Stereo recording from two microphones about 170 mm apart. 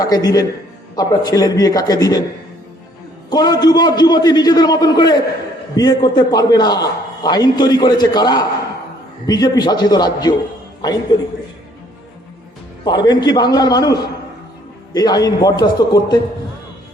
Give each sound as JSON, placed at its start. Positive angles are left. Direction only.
{"t": 0.0, "sound": "a man's voice", "side_deg": 20}
{"t": 3.2, "sound": "a man's voice", "side_deg": 25}
{"t": 12.8, "sound": "a man's voice", "side_deg": 25}